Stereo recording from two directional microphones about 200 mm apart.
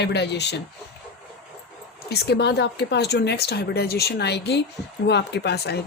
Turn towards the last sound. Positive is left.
turn(degrees=55)  # may be behind; listen again after turning